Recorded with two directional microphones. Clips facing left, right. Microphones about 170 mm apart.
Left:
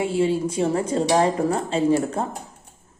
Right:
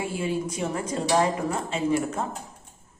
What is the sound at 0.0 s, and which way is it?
Speech, 30° left (ahead or behind).